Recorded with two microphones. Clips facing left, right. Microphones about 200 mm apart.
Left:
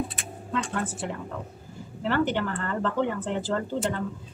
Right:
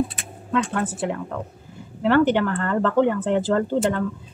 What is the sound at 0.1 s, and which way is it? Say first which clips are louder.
Speech: right 6 dB; 60° right (ahead or behind).